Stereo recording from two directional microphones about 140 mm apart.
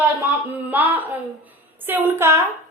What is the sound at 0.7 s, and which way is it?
A woman's voice, 10° right (ahead or behind).